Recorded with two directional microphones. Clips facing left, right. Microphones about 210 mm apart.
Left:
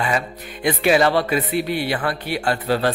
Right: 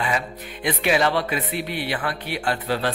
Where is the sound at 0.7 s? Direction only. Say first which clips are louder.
Left 4 dB; 40° left (ahead or behind).